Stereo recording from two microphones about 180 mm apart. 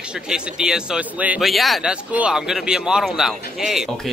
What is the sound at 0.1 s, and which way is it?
Speech, 5° right (ahead or behind).